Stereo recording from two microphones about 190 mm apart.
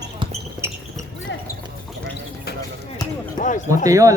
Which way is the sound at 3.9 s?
15° right (ahead or behind).